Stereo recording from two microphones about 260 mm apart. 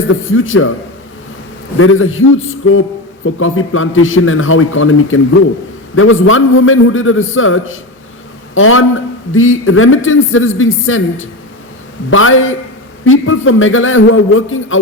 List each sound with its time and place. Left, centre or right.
0.1 s a man's voice: left
1.8 s a man's voice: left